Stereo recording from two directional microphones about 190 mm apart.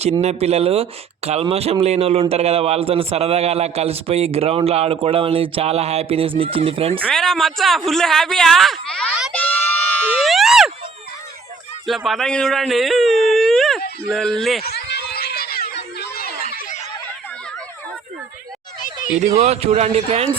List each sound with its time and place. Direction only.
0.2 s a man's voice: 35° right (ahead or behind)
7.0 s speech: 5° left (ahead or behind)
10.1 s a sound: centre (ahead or behind)
11.9 s speech: centre (ahead or behind)
13.2 s wail: centre (ahead or behind)
14.1 s speech: centre (ahead or behind)
14.6 s a sound: 55° left (ahead or behind)
19.4 s a man's voice: 35° right (ahead or behind)